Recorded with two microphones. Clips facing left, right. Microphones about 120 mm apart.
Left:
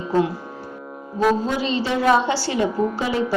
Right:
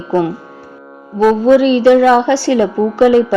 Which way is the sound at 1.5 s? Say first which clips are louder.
Right 14 dB; 65° right (ahead or behind).